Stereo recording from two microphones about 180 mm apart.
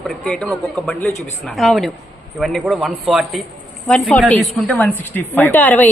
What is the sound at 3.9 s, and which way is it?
A woman's voice, 10° left (ahead or behind).